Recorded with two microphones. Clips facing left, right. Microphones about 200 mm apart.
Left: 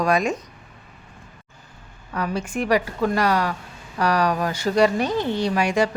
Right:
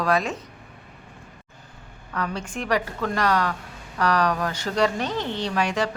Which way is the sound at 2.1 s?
10° left (ahead or behind).